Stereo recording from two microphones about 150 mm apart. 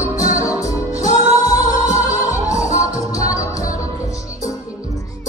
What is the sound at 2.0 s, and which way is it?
Music, 55° left (ahead or behind).